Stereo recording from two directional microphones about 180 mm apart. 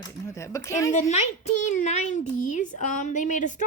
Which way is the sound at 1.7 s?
40° left (ahead or behind).